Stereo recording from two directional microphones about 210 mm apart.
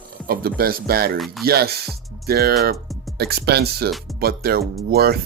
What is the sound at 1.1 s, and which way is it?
Speech, centre (ahead or behind).